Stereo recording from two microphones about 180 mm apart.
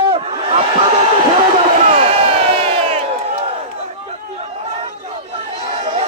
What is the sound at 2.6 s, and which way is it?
Crowd, 35° right (ahead or behind).